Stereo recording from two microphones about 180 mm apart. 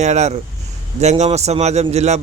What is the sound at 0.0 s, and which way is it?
A man's voice, 40° right (ahead or behind).